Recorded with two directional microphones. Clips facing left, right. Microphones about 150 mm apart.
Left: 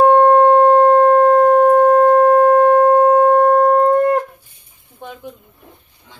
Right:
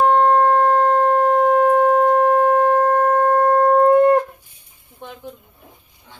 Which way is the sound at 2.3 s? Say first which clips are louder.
Left 5 dB; 40° left (ahead or behind).